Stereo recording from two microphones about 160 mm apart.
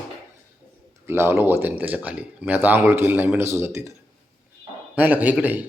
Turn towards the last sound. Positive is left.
turn(degrees=-10)  # may be behind; listen again after turning